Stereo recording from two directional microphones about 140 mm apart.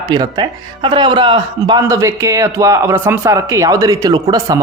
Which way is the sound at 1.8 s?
20° right (ahead or behind).